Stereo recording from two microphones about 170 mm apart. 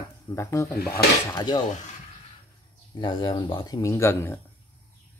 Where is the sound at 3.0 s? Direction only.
25° left (ahead or behind).